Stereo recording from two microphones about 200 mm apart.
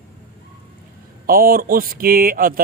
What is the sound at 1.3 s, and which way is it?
Speech, 45° right (ahead or behind).